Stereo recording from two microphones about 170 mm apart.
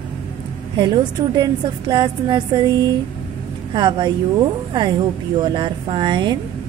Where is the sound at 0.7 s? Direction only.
25° right (ahead or behind).